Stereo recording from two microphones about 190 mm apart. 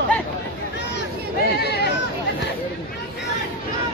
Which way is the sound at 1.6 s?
60° left (ahead or behind).